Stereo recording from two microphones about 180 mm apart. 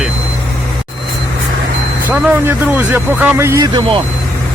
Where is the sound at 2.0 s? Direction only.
10° right (ahead or behind).